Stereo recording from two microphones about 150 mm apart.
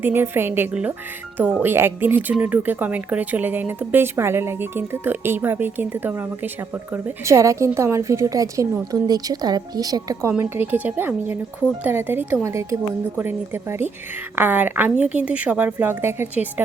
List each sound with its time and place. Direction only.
0.0 s a woman's voice: 15° right (ahead or behind)